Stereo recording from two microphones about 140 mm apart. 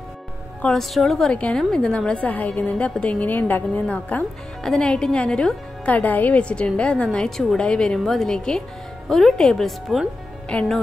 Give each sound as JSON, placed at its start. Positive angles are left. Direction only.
{"t": 0.6, "sound": "a woman's voice", "side_deg": 5}